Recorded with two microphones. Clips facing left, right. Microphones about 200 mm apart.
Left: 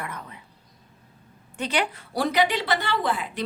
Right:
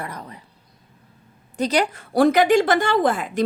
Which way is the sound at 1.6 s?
40° right (ahead or behind).